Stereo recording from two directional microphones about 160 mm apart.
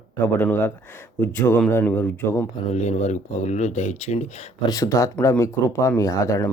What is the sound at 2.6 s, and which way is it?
Speech, 45° left (ahead or behind).